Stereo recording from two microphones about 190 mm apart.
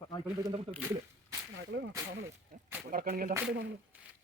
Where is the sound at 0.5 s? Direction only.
30° right (ahead or behind).